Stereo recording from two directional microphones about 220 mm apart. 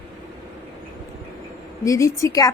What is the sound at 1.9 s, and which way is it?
Speech, 15° left (ahead or behind).